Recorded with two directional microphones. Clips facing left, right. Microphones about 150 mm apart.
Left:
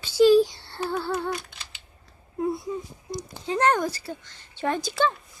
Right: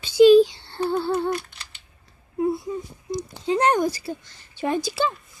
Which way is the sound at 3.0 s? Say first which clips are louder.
Right 8 dB; 20° right (ahead or behind).